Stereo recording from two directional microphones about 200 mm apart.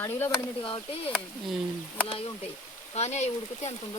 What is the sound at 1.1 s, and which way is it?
Speech, centre (ahead or behind).